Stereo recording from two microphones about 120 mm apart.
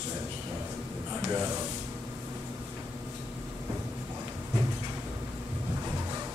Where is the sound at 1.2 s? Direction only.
30° right (ahead or behind).